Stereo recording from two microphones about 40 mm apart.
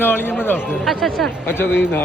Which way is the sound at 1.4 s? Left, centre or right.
Left.